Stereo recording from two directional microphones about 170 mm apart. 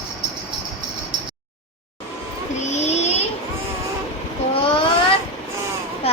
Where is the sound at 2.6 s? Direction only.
40° left (ahead or behind).